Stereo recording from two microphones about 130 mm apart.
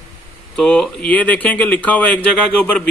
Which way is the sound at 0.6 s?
5° left (ahead or behind).